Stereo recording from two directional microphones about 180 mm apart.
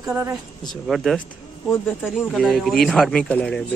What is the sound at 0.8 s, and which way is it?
Speech, centre (ahead or behind).